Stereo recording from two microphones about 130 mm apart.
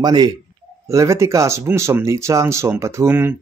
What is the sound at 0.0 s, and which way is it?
Speech, 30° right (ahead or behind).